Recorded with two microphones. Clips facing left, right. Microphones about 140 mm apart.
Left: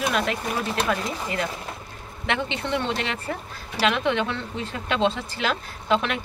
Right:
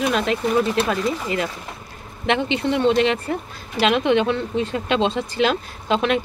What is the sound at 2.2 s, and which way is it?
Speech, 20° right (ahead or behind).